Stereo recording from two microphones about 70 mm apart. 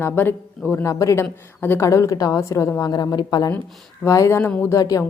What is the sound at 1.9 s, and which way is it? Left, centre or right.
Speech, left.